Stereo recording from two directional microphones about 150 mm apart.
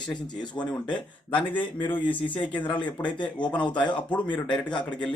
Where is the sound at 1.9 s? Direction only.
35° left (ahead or behind).